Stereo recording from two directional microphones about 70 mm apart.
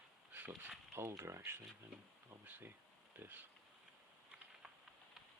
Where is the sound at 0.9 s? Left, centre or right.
Right.